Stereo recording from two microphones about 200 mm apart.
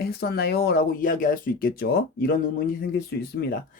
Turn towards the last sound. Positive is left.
turn(degrees=50)  # may be behind; listen again after turning